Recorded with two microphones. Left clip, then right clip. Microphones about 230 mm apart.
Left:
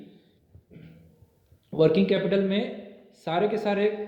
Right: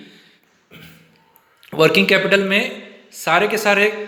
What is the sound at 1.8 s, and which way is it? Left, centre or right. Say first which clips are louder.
Speech: right 8 dB; centre.